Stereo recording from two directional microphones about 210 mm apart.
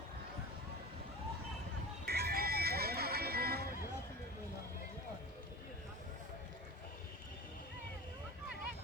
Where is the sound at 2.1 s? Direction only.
50° right (ahead or behind).